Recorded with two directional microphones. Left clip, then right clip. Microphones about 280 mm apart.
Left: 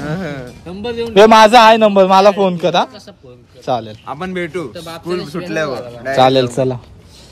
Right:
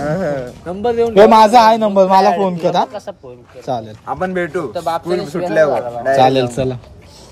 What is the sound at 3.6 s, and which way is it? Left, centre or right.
A woman's voice, centre.